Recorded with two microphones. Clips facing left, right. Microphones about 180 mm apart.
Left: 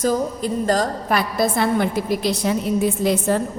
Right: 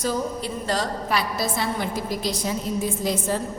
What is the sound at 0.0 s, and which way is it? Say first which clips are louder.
A woman's voice: left 5 dB; 45° left (ahead or behind).